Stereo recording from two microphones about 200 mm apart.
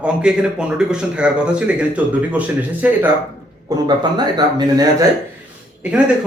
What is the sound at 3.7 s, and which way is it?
Speech, 20° right (ahead or behind).